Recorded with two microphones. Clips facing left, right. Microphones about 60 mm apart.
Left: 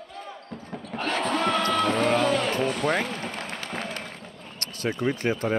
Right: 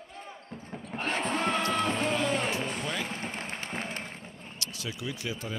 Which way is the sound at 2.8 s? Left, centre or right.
Left.